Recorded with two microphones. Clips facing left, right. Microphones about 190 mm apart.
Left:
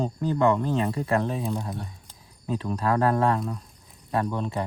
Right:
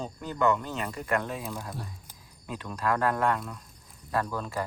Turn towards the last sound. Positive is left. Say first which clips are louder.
# left 4 dB
turn(degrees=25)  # may be behind; listen again after turning